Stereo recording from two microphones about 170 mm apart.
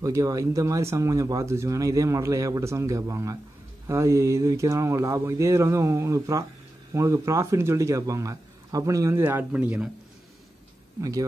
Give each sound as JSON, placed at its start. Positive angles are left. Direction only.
{"t": 0.0, "sound": "a man's voice", "side_deg": -20}
{"t": 11.0, "sound": "speech", "side_deg": -20}